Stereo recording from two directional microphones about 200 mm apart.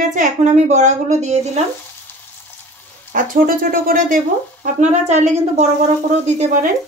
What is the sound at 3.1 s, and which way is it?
A woman's voice, 45° right (ahead or behind).